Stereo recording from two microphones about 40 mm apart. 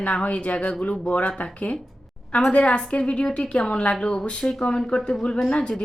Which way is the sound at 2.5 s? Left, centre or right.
Left.